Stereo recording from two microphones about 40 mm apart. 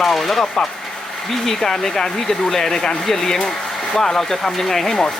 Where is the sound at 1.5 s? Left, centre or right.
Centre.